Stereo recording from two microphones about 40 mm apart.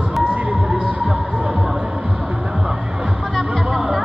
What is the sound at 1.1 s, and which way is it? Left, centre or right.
Music, right.